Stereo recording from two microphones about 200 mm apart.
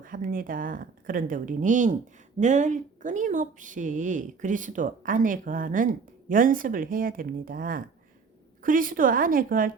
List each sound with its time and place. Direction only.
0.0 s speech: 45° right (ahead or behind)